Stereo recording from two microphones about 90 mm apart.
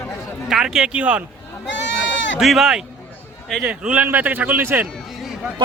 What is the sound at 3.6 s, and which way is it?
A man's voice, 15° right (ahead or behind).